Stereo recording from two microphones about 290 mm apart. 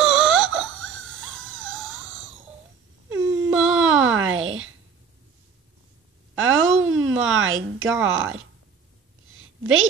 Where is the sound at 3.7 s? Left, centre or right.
Right.